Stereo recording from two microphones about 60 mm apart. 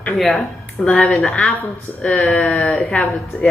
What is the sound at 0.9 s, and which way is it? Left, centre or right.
Speech, left.